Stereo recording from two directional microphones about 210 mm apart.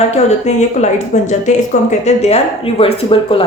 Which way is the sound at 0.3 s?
35° left (ahead or behind).